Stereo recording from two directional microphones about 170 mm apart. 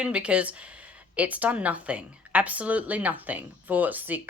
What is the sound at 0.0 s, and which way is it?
Speech, 5° right (ahead or behind).